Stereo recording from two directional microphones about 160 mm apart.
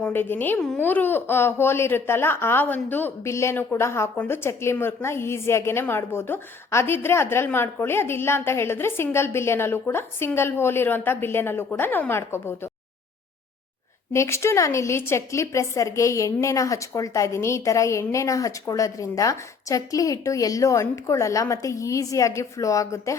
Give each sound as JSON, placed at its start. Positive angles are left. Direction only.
{"t": 0.0, "sound": "speech", "side_deg": 15}
{"t": 14.1, "sound": "a woman's voice", "side_deg": 15}